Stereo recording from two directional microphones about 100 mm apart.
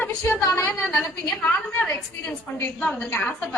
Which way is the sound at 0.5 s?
20° left (ahead or behind).